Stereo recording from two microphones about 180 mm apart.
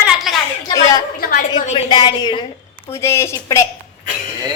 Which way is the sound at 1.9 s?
25° left (ahead or behind).